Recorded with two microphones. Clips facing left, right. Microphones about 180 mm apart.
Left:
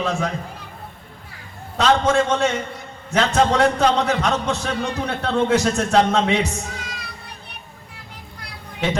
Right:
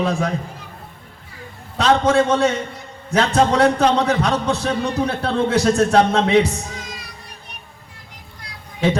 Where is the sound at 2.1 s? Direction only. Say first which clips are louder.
Right 3 dB; 35° right (ahead or behind).